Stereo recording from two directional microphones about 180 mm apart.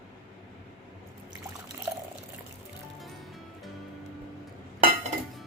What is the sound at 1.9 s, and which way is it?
Drip, 15° right (ahead or behind).